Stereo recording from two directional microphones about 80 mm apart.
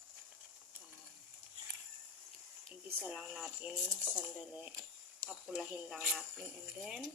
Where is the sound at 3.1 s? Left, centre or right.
Centre.